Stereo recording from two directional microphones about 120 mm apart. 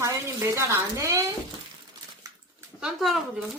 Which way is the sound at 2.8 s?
5° right (ahead or behind).